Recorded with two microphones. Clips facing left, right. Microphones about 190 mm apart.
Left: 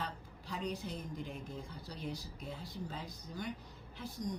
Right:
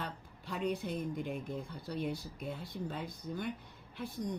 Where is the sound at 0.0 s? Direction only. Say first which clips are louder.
Right 1 dB; 55° right (ahead or behind).